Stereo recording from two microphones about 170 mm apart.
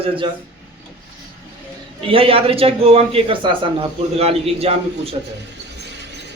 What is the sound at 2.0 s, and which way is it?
A man's voice, 30° right (ahead or behind).